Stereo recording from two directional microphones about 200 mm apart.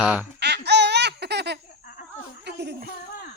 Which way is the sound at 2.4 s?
55° right (ahead or behind).